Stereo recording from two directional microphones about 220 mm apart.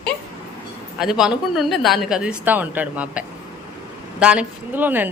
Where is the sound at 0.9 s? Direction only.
Centre (ahead or behind).